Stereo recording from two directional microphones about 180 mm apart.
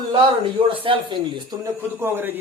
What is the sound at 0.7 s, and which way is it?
A man's voice, 30° right (ahead or behind).